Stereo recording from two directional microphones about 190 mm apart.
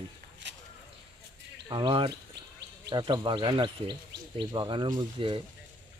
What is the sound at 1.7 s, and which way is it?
Speech, 25° right (ahead or behind).